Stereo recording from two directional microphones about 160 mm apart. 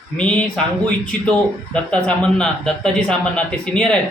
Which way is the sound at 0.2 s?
5° left (ahead or behind).